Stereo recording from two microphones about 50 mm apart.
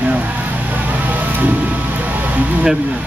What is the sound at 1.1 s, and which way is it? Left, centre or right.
Vehicle, right.